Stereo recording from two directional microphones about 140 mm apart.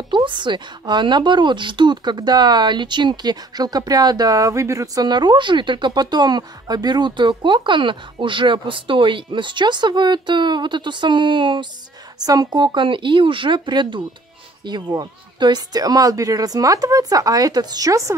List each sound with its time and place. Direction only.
0.1 s speech: 35° right (ahead or behind)